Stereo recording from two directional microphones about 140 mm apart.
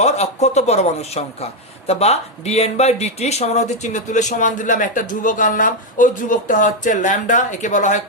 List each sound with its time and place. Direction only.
0.0 s speech: 55° left (ahead or behind)